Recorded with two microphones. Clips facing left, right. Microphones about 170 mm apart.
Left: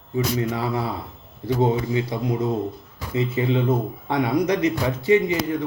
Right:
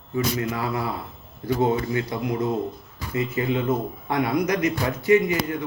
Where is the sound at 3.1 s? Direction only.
25° left (ahead or behind).